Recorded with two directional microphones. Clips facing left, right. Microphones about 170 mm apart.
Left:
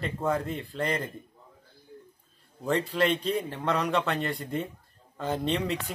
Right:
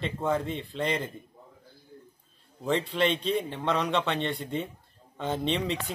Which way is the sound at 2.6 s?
Centre (ahead or behind).